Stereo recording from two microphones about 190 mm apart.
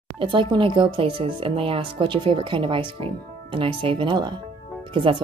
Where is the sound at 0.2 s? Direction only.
25° right (ahead or behind).